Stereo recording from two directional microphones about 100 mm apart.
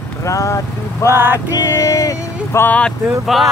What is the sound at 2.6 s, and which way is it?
Speech, 15° left (ahead or behind).